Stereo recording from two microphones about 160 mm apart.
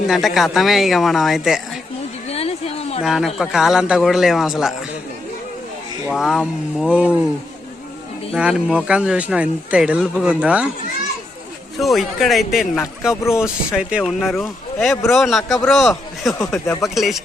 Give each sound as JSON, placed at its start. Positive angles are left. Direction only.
{"t": 0.1, "sound": "a man's voice", "side_deg": 0}
{"t": 2.3, "sound": "a sound", "side_deg": 40}
{"t": 3.0, "sound": "a man's voice", "side_deg": 0}
{"t": 6.1, "sound": "a man's voice", "side_deg": 0}
{"t": 8.3, "sound": "speech", "side_deg": -5}
{"t": 11.8, "sound": "a man's voice", "side_deg": 0}
{"t": 16.4, "sound": "speech", "side_deg": 20}
{"t": 16.8, "sound": "a man's voice", "side_deg": 0}